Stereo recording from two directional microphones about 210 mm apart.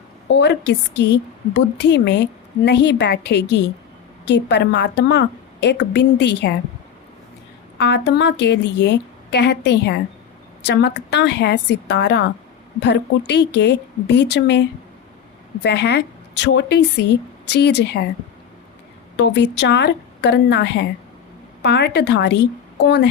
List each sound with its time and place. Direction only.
0.3 s a woman's voice: 55° left (ahead or behind)
7.8 s a woman's voice: 55° left (ahead or behind)
15.6 s a woman's voice: 55° left (ahead or behind)
19.1 s a woman's voice: 55° left (ahead or behind)